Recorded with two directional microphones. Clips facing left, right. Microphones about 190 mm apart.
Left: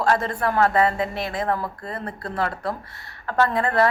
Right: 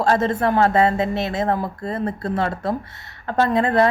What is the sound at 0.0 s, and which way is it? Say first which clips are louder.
A woman's voice: right 4 dB; 25° right (ahead or behind).